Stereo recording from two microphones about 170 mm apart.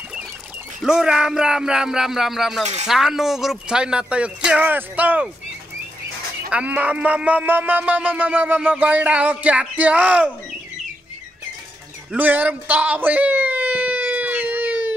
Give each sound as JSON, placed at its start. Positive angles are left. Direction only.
{"t": 0.7, "sound": "speech", "side_deg": -5}
{"t": 2.6, "sound": "speech", "side_deg": -40}
{"t": 2.9, "sound": "speech", "side_deg": 0}
{"t": 6.5, "sound": "music", "side_deg": -10}
{"t": 12.1, "sound": "a sound", "side_deg": -10}